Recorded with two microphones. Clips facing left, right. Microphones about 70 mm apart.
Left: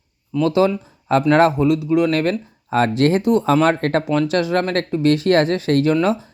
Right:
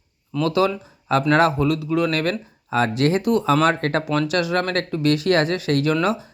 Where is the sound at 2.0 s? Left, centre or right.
Left.